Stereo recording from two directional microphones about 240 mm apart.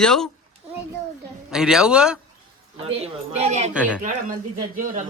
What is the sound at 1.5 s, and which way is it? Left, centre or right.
Speech, centre.